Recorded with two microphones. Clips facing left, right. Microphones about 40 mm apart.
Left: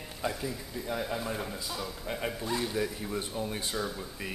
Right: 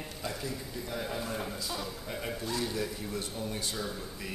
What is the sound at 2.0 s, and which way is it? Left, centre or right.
Speech, centre.